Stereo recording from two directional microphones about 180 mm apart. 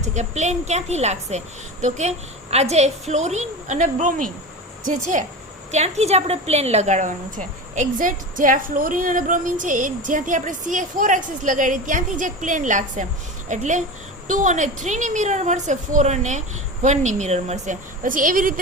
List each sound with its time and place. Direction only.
0.0 s a woman's voice: 40° right (ahead or behind)
5.7 s a woman's voice: 35° right (ahead or behind)